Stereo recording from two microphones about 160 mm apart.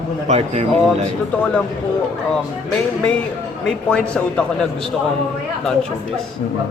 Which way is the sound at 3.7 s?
5° left (ahead or behind).